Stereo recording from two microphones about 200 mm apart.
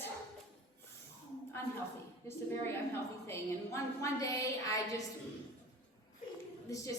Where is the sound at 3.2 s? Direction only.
15° left (ahead or behind).